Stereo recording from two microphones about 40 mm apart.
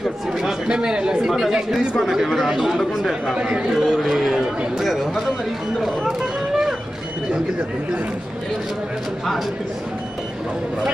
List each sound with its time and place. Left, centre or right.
0.7 s speech: right
1.2 s speech: centre
3.3 s speech: right
3.8 s speech: centre
6.0 s a sound: centre